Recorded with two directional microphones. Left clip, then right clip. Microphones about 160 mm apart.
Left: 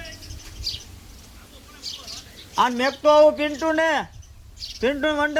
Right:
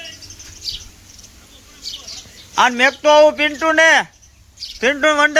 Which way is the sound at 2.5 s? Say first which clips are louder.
Right 7 dB; 20° right (ahead or behind).